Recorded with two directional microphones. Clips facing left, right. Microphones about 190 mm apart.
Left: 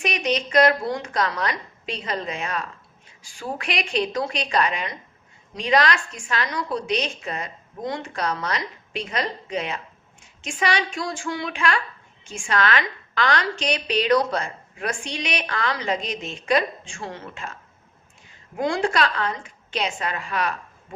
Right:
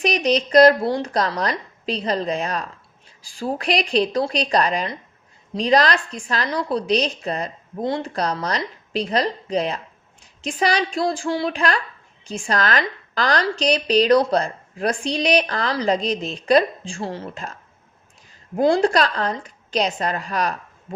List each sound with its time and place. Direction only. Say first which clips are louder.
0.0 s a woman's voice: right 5 dB; 35° right (ahead or behind)